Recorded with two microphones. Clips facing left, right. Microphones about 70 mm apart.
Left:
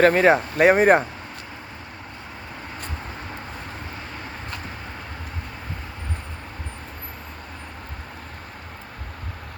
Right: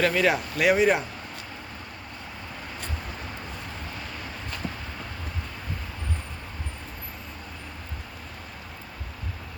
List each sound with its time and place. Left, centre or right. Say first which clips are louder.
0.0 s speech: left 7 dB; left